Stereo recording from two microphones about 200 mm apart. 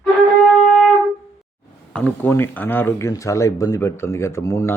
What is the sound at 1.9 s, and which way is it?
Speech, 10° left (ahead or behind).